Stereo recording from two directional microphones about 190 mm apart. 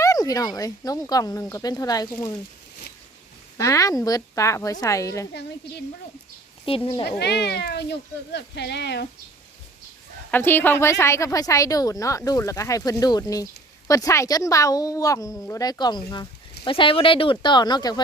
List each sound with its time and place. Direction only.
0.0 s a woman's voice: 20° left (ahead or behind)
3.6 s a woman's voice: 15° left (ahead or behind)
6.7 s speech: 30° left (ahead or behind)
7.2 s speech: 60° left (ahead or behind)
10.3 s a woman's voice: 10° left (ahead or behind)